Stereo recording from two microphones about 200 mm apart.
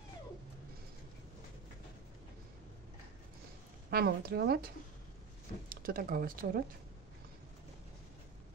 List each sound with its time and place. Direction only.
3.9 s speech: 50° right (ahead or behind)